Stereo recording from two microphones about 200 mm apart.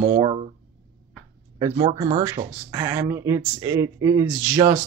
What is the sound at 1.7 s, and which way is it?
Speech, 25° right (ahead or behind).